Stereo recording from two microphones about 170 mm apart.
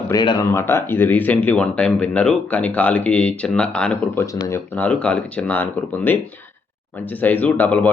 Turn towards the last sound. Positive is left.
turn(degrees=10)  # may be behind; listen again after turning